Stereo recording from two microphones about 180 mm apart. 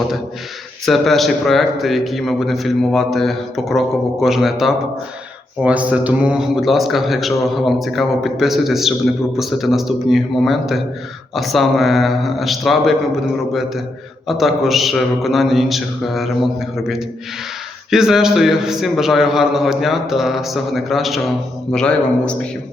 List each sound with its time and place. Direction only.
0.9 s a man's voice: centre (ahead or behind)